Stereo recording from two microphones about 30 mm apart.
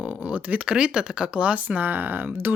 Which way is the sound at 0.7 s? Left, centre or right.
Right.